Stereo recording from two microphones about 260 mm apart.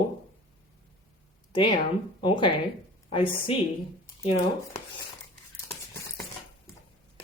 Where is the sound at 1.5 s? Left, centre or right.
Centre.